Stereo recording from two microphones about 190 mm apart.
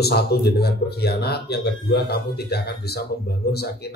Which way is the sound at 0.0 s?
55° left (ahead or behind).